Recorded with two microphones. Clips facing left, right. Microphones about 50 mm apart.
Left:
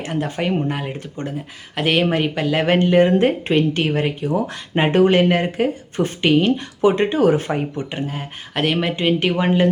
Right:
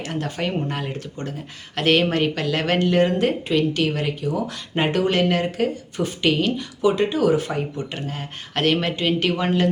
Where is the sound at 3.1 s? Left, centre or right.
Left.